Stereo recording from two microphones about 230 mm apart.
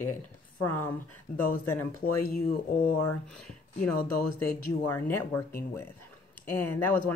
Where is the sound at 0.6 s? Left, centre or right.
Centre.